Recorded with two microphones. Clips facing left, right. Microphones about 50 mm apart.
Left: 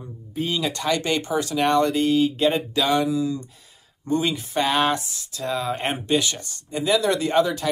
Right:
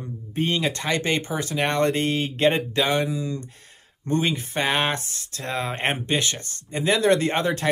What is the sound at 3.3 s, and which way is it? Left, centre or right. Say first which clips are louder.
Speech: left 1 dB; right.